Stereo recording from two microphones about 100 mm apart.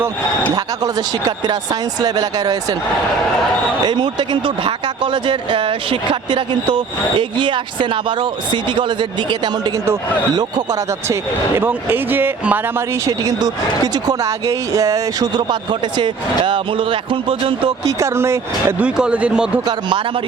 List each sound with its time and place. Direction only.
0.5 s speech: 40° right (ahead or behind)
3.8 s speech: 50° right (ahead or behind)
11.1 s speech: 20° right (ahead or behind)
13.1 s speech: 35° right (ahead or behind)
15.4 s speech: 50° right (ahead or behind)
17.8 s speech: 25° right (ahead or behind)
18.8 s speech: 10° right (ahead or behind)